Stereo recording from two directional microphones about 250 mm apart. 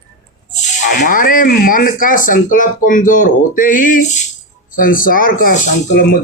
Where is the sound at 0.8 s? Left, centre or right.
Left.